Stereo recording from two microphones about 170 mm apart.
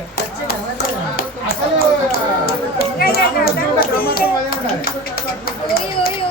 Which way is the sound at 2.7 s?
65° left (ahead or behind).